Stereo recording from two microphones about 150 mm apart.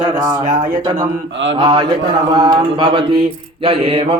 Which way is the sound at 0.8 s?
30° right (ahead or behind).